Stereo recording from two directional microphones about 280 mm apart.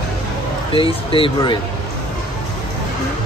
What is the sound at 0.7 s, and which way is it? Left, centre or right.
Speech, centre.